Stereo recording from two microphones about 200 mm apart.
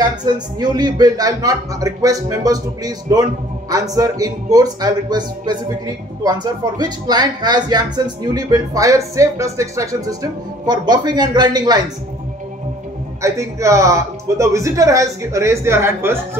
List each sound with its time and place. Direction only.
0.0 s speech: 20° right (ahead or behind)
13.2 s a man's voice: 15° right (ahead or behind)